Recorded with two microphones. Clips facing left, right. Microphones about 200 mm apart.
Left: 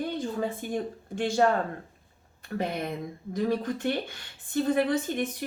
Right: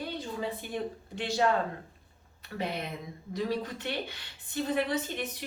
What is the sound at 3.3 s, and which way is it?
A woman's voice, 50° left (ahead or behind).